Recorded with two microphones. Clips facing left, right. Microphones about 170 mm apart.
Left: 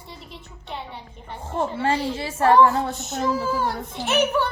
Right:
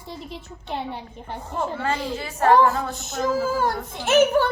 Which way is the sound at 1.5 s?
25° left (ahead or behind).